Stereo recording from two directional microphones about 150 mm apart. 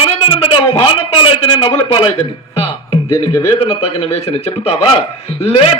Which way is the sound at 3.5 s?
40° left (ahead or behind).